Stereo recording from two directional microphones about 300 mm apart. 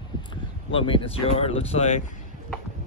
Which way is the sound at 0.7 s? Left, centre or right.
Centre.